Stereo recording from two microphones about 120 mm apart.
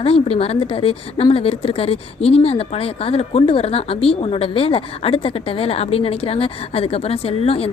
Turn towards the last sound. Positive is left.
turn(degrees=55)  # may be behind; listen again after turning